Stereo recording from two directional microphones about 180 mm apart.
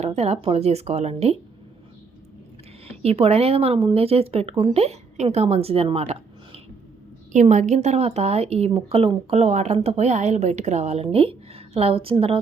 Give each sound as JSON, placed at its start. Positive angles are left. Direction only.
{"t": 0.2, "sound": "speech", "side_deg": -35}
{"t": 2.8, "sound": "speech", "side_deg": -35}